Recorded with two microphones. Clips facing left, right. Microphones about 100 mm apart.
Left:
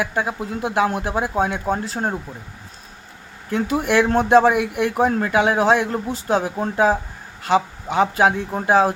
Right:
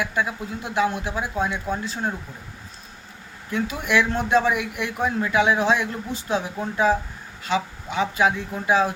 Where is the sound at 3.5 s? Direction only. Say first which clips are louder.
Left 4 dB; 45° left (ahead or behind).